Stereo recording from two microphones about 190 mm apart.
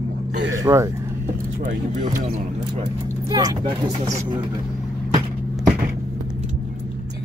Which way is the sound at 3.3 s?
20° right (ahead or behind).